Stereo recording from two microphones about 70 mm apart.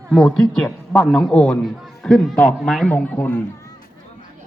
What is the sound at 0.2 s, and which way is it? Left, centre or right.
Mantra, centre.